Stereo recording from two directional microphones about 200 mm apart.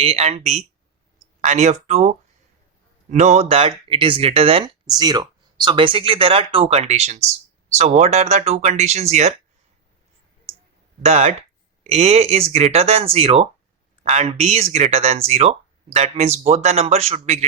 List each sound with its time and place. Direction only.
0.0 s speech: 30° right (ahead or behind)
11.0 s speech: 35° right (ahead or behind)